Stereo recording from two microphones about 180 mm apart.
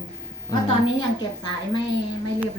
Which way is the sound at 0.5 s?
20° left (ahead or behind).